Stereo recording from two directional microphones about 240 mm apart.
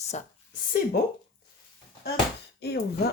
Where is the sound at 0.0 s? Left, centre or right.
Left.